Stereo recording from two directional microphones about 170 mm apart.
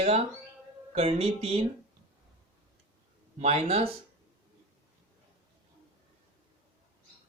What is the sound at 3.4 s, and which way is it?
Speech, 35° right (ahead or behind).